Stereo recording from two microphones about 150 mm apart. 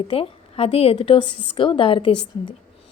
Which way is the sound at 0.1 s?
40° left (ahead or behind).